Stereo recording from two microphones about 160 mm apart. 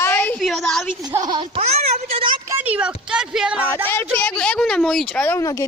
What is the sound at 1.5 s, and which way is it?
Speech, 40° right (ahead or behind).